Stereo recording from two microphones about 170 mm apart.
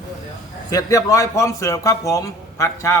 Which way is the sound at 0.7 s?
20° left (ahead or behind).